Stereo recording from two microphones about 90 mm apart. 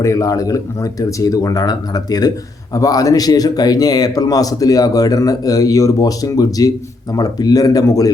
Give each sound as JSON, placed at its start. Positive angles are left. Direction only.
{"t": 0.0, "sound": "speech", "side_deg": 35}